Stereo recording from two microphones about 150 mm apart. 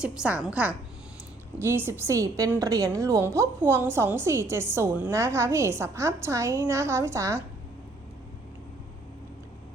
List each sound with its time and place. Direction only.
0.0 s a woman's voice: 5° right (ahead or behind)